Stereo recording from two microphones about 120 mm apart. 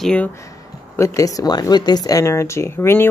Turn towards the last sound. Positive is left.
turn(degrees=20)  # may be behind; listen again after turning